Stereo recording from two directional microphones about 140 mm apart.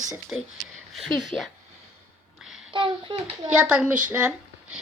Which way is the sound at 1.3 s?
10° left (ahead or behind).